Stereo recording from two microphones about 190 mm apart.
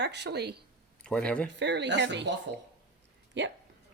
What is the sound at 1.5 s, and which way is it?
Speech, 65° right (ahead or behind).